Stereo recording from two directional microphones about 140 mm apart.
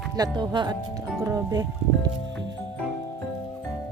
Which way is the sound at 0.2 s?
30° right (ahead or behind).